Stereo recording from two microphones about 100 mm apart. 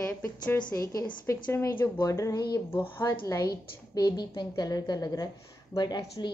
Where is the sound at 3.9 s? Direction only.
45° left (ahead or behind).